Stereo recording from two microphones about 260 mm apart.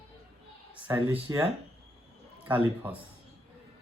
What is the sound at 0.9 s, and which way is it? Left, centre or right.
Speech, centre.